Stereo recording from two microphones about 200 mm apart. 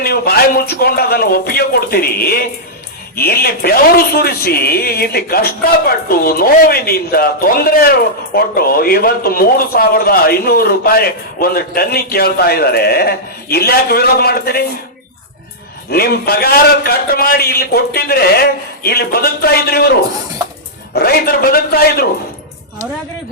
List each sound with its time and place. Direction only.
0.0 s a woman's voice: 50° left (ahead or behind)
15.9 s a woman's voice: 50° left (ahead or behind)
20.9 s a woman's voice: 50° left (ahead or behind)